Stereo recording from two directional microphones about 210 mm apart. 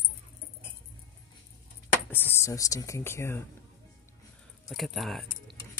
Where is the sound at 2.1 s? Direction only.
10° left (ahead or behind).